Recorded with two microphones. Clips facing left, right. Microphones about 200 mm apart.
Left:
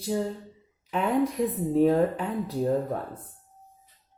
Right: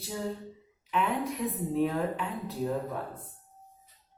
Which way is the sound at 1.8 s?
40° left (ahead or behind).